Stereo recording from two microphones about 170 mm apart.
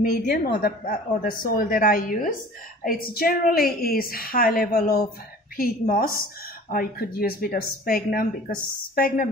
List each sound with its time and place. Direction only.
0.0 s speech: 60° left (ahead or behind)